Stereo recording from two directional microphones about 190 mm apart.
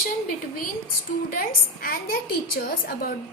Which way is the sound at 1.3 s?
50° left (ahead or behind).